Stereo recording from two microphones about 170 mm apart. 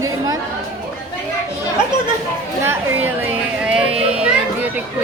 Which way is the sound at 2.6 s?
10° right (ahead or behind).